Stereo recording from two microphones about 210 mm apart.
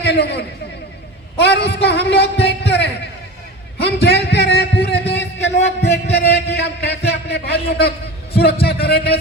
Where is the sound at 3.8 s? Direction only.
50° left (ahead or behind).